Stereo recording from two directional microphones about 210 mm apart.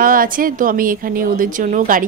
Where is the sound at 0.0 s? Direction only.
40° right (ahead or behind).